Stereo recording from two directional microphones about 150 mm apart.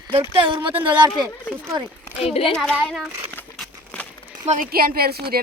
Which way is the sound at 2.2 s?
40° left (ahead or behind).